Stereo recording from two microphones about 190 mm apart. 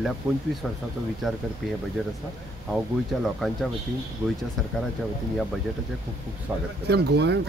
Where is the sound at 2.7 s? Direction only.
Centre (ahead or behind).